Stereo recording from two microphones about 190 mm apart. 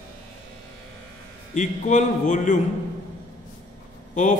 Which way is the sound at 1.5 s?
40° left (ahead or behind).